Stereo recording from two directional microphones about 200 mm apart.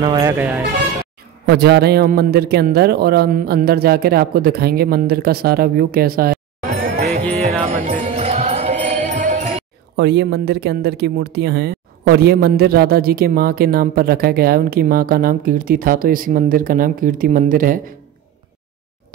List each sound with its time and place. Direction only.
0.0 s speech: 20° right (ahead or behind)
1.4 s speech: 55° right (ahead or behind)
7.7 s music: 30° right (ahead or behind)
9.9 s speech: 60° right (ahead or behind)